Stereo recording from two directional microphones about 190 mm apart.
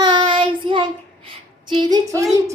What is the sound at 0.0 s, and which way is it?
Child singing, 25° right (ahead or behind).